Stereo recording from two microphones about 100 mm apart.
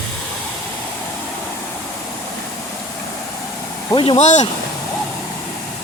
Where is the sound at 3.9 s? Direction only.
55° left (ahead or behind).